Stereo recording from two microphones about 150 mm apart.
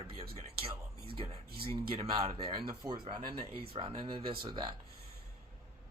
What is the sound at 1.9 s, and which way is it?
Speech, 35° right (ahead or behind).